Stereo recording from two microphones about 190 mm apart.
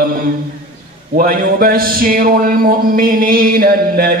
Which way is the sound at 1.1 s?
50° right (ahead or behind).